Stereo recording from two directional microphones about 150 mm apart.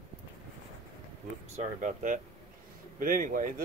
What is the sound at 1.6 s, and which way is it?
Speech, 55° right (ahead or behind).